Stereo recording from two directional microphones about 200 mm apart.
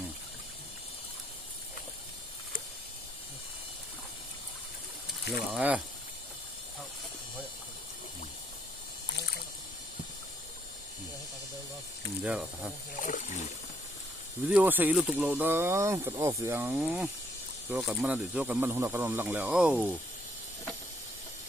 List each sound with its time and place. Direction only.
5.3 s speech: 5° right (ahead or behind)
12.2 s speech: 5° right (ahead or behind)
13.0 s rowboat: 40° left (ahead or behind)
14.5 s speech: 10° right (ahead or behind)